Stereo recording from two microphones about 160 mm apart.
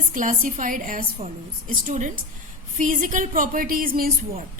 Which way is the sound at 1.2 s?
45° right (ahead or behind).